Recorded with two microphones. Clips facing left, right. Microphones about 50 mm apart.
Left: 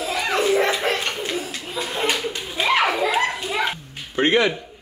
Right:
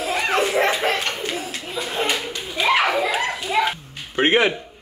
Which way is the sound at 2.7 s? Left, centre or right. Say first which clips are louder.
Even; centre.